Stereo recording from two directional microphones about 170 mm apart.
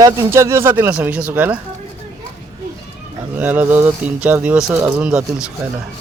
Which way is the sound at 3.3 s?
10° right (ahead or behind).